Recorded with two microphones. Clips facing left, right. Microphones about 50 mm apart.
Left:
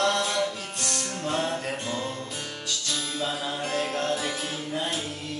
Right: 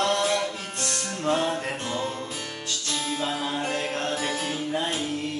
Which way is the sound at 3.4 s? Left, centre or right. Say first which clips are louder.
Right 1 dB; right.